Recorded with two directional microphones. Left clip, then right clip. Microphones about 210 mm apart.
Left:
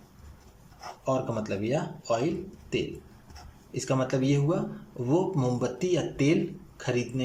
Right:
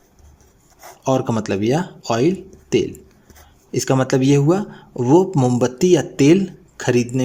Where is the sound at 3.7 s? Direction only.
55° right (ahead or behind).